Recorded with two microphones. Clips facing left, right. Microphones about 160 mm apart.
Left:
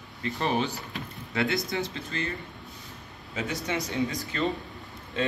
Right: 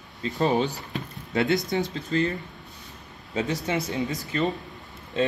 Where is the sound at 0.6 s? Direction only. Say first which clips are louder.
Right 3 dB; 35° right (ahead or behind).